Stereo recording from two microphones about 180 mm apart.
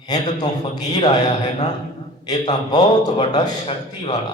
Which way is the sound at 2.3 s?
25° left (ahead or behind).